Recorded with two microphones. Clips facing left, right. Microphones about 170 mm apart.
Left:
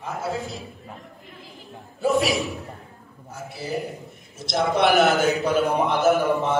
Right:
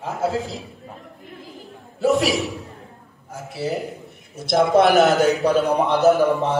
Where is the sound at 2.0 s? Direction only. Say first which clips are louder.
Right 3 dB; 90° right.